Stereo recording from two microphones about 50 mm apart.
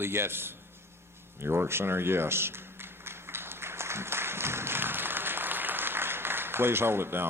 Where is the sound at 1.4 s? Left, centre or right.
Right.